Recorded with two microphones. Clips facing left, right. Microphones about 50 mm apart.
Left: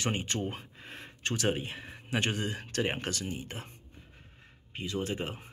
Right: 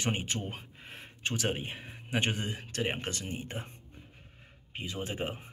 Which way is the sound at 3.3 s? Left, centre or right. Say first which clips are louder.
Even; right.